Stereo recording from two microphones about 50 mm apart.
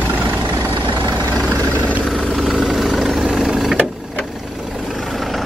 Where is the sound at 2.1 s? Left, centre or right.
Centre.